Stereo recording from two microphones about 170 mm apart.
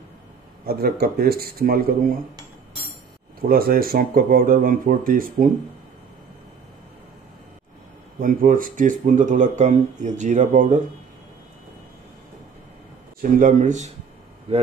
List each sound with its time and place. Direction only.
0.7 s speech: 65° right (ahead or behind)
3.3 s speech: 60° right (ahead or behind)
8.2 s speech: 55° right (ahead or behind)
13.2 s speech: 50° right (ahead or behind)